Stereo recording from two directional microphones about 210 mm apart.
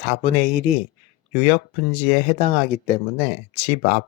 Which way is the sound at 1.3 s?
30° left (ahead or behind).